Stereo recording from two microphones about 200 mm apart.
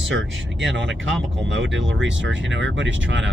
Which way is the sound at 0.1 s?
65° right (ahead or behind).